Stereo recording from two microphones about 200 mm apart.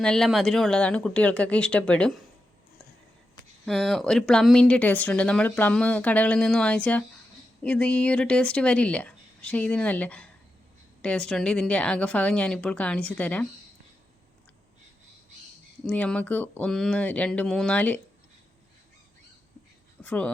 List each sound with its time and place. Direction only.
0.0 s speech: centre (ahead or behind)
3.7 s speech: centre (ahead or behind)
15.9 s speech: 5° left (ahead or behind)
20.0 s speech: 5° left (ahead or behind)